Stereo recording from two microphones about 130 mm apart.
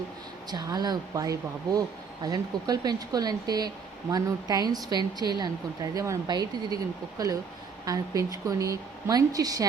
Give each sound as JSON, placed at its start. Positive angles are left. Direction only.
{"t": 0.5, "sound": "a woman's voice", "side_deg": -30}